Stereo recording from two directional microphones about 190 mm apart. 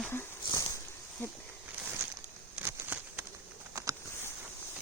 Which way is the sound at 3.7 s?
15° right (ahead or behind).